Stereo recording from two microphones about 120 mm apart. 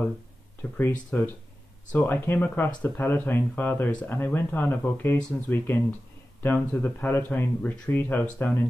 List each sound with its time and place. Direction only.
0.6 s speech: 20° left (ahead or behind)